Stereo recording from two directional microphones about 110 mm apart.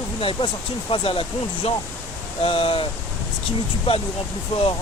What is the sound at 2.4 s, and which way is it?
Speech, 55° left (ahead or behind).